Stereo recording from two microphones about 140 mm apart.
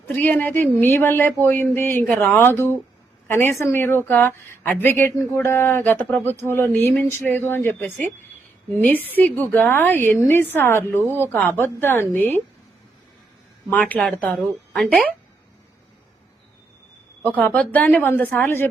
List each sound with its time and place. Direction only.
0.1 s speech: 10° left (ahead or behind)
13.7 s speech: 10° left (ahead or behind)
17.2 s speech: 10° left (ahead or behind)